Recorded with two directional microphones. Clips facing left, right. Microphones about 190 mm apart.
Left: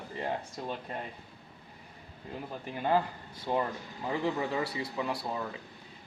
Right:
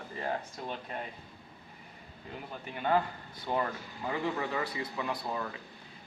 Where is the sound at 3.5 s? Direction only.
5° left (ahead or behind).